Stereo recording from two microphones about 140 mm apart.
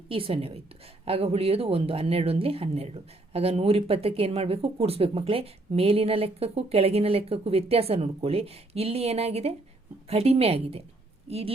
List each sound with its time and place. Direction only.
0.1 s a woman's voice: 40° right (ahead or behind)